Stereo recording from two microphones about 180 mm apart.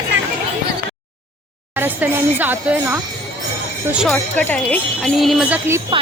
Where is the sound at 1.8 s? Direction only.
10° right (ahead or behind).